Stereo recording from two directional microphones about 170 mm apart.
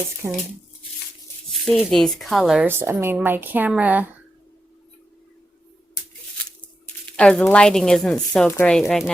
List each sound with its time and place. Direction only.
0.2 s speech: 15° right (ahead or behind)
1.6 s speech: centre (ahead or behind)
7.2 s speech: 5° left (ahead or behind)